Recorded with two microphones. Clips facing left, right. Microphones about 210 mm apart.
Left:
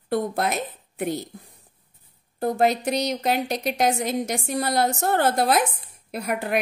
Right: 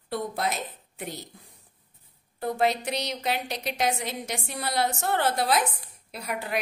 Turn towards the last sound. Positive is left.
turn(degrees=55)  # may be behind; listen again after turning